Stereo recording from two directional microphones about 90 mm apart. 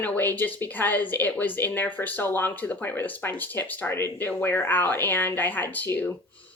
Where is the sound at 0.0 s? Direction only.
20° left (ahead or behind).